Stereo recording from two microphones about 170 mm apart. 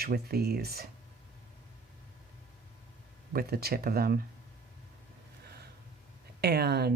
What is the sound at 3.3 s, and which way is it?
Speech, 65° right (ahead or behind).